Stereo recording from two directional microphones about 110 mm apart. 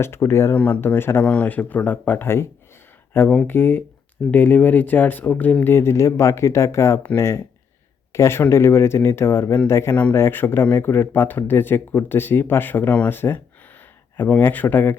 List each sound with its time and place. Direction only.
0.0 s speech: 25° left (ahead or behind)